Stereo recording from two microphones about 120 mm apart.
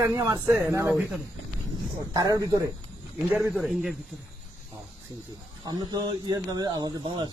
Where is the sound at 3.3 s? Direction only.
5° right (ahead or behind).